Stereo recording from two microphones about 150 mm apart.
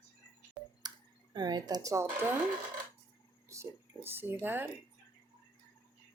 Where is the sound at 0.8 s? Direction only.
30° right (ahead or behind).